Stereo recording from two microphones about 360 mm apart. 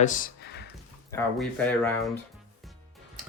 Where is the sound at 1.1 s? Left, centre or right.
Centre.